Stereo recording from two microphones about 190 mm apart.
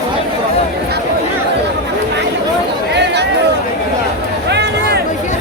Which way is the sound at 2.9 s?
65° right (ahead or behind).